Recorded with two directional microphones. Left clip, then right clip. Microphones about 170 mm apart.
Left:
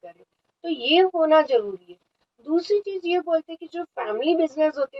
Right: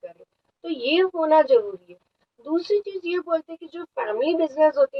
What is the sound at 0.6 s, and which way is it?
Speech, 25° left (ahead or behind).